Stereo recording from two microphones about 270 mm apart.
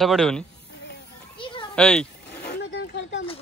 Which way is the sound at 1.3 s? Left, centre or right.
Centre.